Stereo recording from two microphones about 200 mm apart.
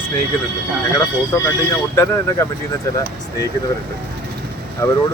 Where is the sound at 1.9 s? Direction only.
15° left (ahead or behind).